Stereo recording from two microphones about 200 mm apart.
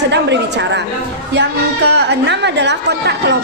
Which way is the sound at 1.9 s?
60° right (ahead or behind).